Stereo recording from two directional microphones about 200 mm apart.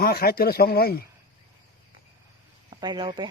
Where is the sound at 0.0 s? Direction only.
50° left (ahead or behind).